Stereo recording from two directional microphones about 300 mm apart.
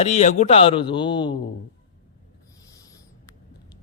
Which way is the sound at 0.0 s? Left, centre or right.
Left.